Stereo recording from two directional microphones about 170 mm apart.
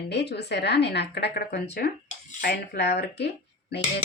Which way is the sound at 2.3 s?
60° left (ahead or behind).